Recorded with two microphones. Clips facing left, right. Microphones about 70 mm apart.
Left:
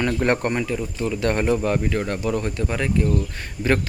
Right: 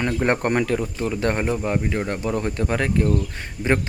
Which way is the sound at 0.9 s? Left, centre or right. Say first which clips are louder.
Even; right.